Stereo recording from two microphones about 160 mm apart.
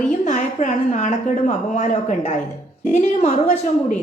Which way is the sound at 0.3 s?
50° left (ahead or behind).